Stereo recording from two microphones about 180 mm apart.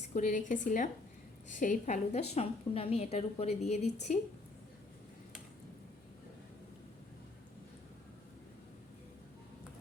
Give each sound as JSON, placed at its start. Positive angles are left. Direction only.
{"t": 0.1, "sound": "a woman's voice", "side_deg": 45}